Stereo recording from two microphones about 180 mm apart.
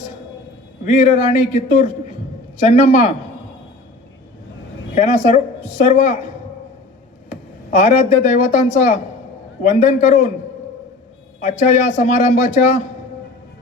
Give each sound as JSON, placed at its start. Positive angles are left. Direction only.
{"t": 0.9, "sound": "a woman's voice", "side_deg": 45}
{"t": 4.9, "sound": "a woman's voice", "side_deg": 45}
{"t": 7.9, "sound": "a woman's voice", "side_deg": 40}
{"t": 11.3, "sound": "speech", "side_deg": 45}